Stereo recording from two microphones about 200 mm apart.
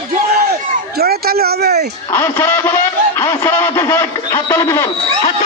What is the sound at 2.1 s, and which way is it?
Speech, 10° left (ahead or behind).